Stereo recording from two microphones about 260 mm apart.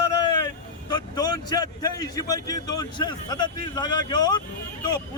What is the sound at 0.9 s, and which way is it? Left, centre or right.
A man's voice, centre.